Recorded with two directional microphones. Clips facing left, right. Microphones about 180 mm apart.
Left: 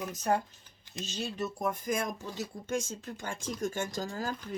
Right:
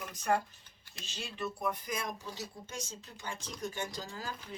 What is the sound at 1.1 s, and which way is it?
Speech, 40° left (ahead or behind).